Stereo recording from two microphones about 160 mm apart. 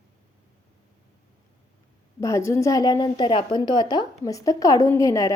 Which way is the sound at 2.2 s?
20° left (ahead or behind).